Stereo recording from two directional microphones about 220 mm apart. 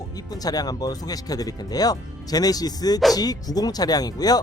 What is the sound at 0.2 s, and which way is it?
Speech, 15° left (ahead or behind).